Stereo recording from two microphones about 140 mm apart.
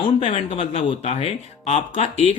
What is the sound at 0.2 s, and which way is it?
Speech, 45° left (ahead or behind).